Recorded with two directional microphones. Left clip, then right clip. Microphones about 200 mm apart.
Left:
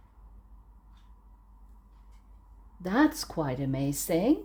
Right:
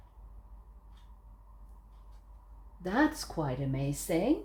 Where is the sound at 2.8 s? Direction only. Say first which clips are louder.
Left 3 dB; 45° left (ahead or behind).